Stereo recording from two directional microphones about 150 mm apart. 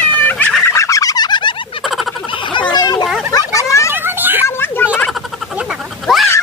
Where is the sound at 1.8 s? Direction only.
Centre (ahead or behind).